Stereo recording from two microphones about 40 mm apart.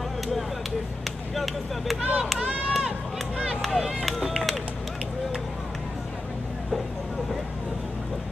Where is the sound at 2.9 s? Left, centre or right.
Right.